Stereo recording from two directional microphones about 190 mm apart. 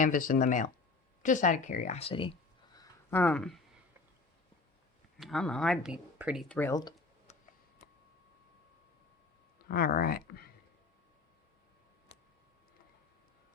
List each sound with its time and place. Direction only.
0.0 s speech: 45° left (ahead or behind); by 2.3 s 30° left (ahead or behind)
2.7 s a sound: 10° left (ahead or behind)
5.1 s speech: centre (ahead or behind)
6.5 s speech: 15° left (ahead or behind)
9.6 s speech: 50° left (ahead or behind)